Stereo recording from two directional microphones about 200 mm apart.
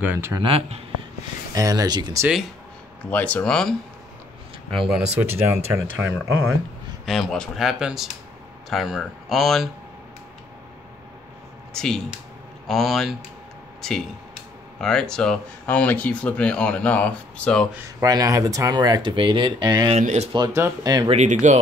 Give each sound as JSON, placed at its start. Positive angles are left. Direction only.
{"t": 0.0, "sound": "speech", "side_deg": -10}
{"t": 0.4, "sound": "speech", "side_deg": -30}
{"t": 1.5, "sound": "speech", "side_deg": -15}
{"t": 3.1, "sound": "speech", "side_deg": 10}
{"t": 7.1, "sound": "speech", "side_deg": 0}
{"t": 11.7, "sound": "speech", "side_deg": 5}
{"t": 18.0, "sound": "speech", "side_deg": -15}
{"t": 20.0, "sound": "speech", "side_deg": -35}
{"t": 20.3, "sound": "speech", "side_deg": -15}
{"t": 21.1, "sound": "speech", "side_deg": -35}